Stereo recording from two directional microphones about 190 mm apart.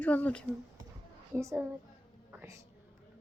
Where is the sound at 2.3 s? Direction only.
15° right (ahead or behind).